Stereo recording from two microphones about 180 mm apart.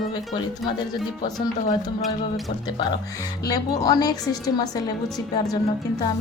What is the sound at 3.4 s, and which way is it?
A woman's voice, 20° left (ahead or behind).